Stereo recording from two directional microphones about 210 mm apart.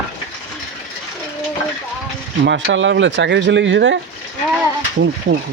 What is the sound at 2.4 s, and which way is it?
Speech, 55° right (ahead or behind).